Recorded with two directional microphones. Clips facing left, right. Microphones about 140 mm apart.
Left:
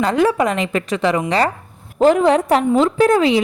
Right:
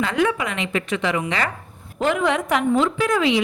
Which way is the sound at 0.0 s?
35° left (ahead or behind).